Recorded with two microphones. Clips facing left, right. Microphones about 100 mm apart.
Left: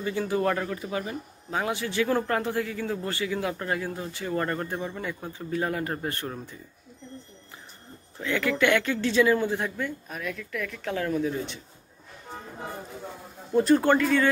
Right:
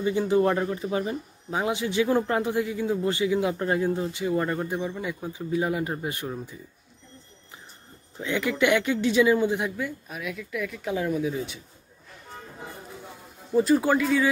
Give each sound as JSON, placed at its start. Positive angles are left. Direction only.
{"t": 0.0, "sound": "speech", "side_deg": -20}
{"t": 8.2, "sound": "speech", "side_deg": -20}
{"t": 13.6, "sound": "speech", "side_deg": -5}